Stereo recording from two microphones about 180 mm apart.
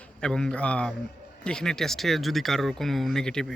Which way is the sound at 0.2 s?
5° left (ahead or behind).